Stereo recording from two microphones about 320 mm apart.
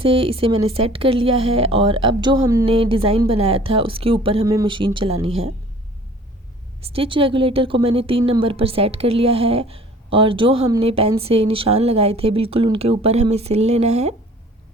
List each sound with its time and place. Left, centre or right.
0.0 s speech: centre
6.8 s speech: centre